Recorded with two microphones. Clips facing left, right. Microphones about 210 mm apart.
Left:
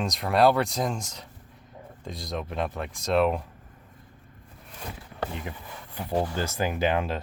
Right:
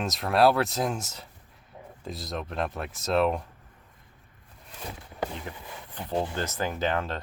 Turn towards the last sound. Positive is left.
turn(degrees=10)  # may be behind; listen again after turning